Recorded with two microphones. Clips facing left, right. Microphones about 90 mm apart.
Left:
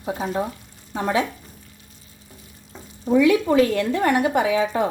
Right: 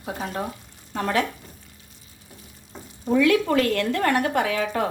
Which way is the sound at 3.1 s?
15° left (ahead or behind).